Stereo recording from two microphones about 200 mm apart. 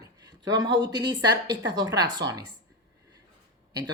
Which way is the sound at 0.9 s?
20° right (ahead or behind).